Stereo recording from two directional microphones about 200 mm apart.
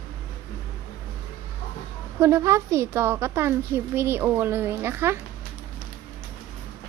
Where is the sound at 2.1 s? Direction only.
15° right (ahead or behind).